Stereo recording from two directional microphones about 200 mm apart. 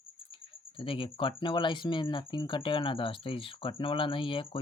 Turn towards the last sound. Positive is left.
turn(degrees=25)  # may be behind; listen again after turning